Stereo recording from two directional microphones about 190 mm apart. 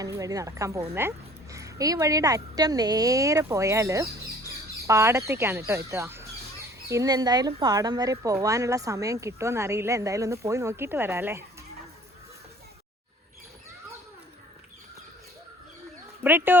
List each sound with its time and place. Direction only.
0.0 s speech: 15° right (ahead or behind)
16.2 s speech: 10° right (ahead or behind)